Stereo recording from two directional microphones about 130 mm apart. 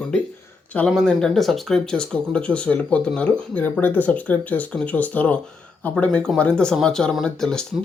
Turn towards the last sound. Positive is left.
turn(degrees=5)  # may be behind; listen again after turning